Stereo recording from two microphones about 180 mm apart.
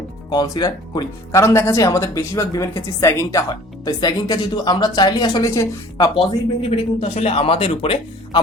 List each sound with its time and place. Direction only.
0.3 s speech: 20° left (ahead or behind)
6.1 s a man's voice: 30° left (ahead or behind)